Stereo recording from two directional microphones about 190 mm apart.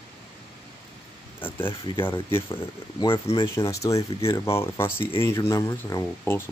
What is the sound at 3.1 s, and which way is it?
Speech, 30° left (ahead or behind).